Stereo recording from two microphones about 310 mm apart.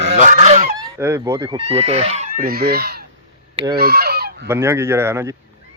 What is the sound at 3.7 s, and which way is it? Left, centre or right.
Goose, right.